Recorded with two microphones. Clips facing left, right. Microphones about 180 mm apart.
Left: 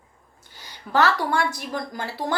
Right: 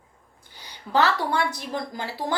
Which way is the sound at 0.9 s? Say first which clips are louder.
Left 1 dB; 20° right (ahead or behind).